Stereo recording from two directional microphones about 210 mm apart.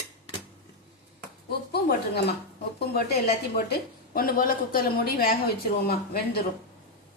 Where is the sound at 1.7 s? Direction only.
50° left (ahead or behind).